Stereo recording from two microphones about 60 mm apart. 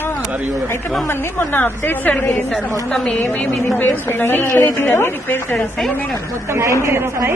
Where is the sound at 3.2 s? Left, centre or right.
Left.